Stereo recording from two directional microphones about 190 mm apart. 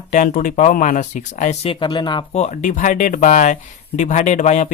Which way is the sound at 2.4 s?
40° left (ahead or behind).